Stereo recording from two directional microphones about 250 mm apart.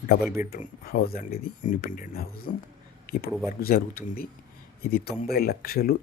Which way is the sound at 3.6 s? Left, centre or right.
Left.